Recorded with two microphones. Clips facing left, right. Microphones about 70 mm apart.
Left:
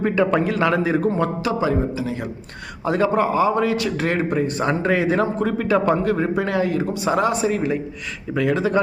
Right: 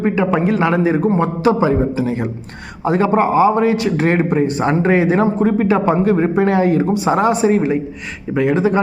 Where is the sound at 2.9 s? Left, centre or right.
Right.